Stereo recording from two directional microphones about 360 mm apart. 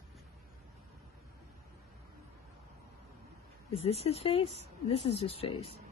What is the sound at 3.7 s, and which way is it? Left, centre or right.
Speech, centre.